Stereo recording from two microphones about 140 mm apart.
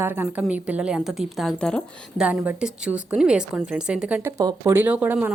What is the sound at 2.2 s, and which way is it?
Speech, 5° right (ahead or behind).